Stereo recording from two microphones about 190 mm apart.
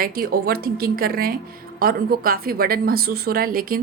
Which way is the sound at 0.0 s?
50° right (ahead or behind).